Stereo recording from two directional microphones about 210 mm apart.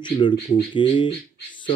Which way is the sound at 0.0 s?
20° left (ahead or behind).